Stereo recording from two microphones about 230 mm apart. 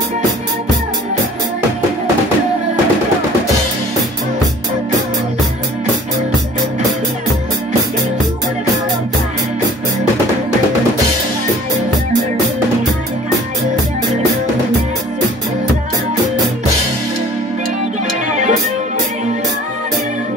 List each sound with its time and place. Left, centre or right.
18.3 s music: right